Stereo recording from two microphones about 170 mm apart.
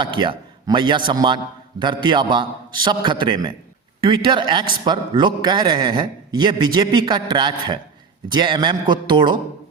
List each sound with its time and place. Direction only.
0.0 s a man's voice: 30° right (ahead or behind)